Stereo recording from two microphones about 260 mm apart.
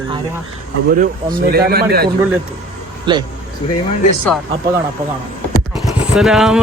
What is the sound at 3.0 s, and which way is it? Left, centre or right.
Speech, centre.